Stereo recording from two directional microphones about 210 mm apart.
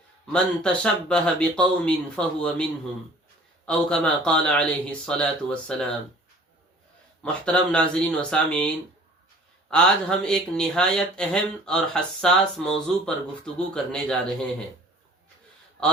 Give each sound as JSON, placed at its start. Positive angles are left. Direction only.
{"t": 0.3, "sound": "speech", "side_deg": 5}
{"t": 3.7, "sound": "speech", "side_deg": 5}
{"t": 7.2, "sound": "speech", "side_deg": 5}